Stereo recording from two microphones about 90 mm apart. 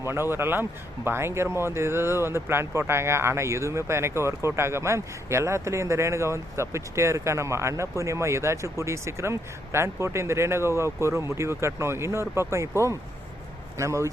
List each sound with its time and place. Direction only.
0.0 s speech: 25° right (ahead or behind)